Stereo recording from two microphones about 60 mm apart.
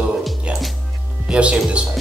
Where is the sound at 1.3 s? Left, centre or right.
Centre.